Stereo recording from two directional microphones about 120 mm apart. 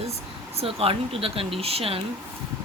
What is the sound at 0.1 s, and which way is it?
Speech, 55° right (ahead or behind).